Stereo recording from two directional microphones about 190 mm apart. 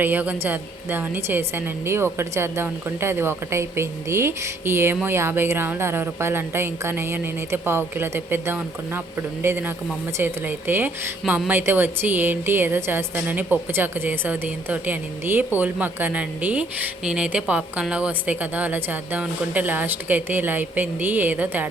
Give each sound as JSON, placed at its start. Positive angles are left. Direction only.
{"t": 0.0, "sound": "speech", "side_deg": -10}